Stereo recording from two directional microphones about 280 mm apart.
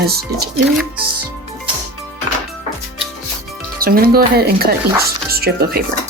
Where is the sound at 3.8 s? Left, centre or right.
Right.